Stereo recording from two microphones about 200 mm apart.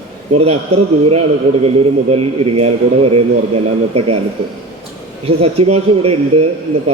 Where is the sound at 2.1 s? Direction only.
30° right (ahead or behind).